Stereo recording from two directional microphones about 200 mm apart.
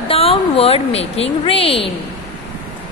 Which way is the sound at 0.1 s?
30° left (ahead or behind).